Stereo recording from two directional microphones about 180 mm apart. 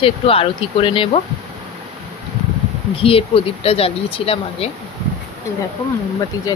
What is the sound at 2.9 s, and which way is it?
Speech, 30° left (ahead or behind).